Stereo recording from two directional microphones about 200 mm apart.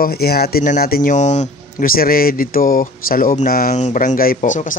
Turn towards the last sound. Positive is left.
turn(degrees=40)  # may be behind; listen again after turning